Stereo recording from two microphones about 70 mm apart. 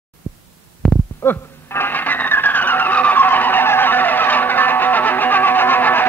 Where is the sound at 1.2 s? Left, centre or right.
Left.